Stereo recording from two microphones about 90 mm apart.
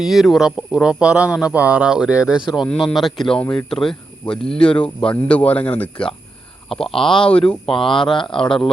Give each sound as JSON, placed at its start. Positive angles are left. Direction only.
{"t": 0.0, "sound": "speech", "side_deg": 0}
{"t": 6.7, "sound": "speech", "side_deg": 5}
{"t": 8.0, "sound": "speech", "side_deg": 65}
{"t": 8.4, "sound": "speech", "side_deg": 5}